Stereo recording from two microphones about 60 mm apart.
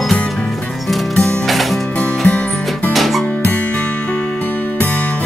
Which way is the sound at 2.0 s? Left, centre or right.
Left.